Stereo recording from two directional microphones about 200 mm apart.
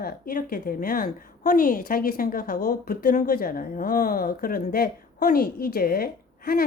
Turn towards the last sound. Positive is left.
turn(degrees=50)  # may be behind; listen again after turning